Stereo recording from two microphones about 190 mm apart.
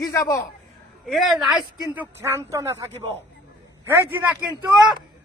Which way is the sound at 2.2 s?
15° right (ahead or behind).